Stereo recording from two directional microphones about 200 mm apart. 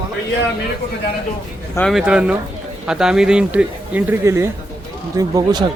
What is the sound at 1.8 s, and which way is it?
Speech, centre (ahead or behind).